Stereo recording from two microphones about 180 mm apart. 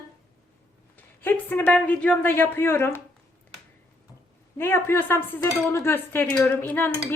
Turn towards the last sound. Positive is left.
turn(degrees=10)  # may be behind; listen again after turning